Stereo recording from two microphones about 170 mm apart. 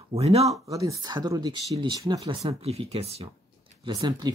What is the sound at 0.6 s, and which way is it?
Speech, 20° right (ahead or behind).